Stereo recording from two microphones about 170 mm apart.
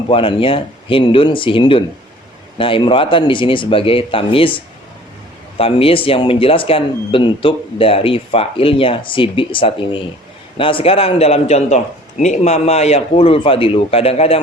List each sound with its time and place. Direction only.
0.1 s speech: 30° left (ahead or behind)
5.5 s speech: 35° left (ahead or behind)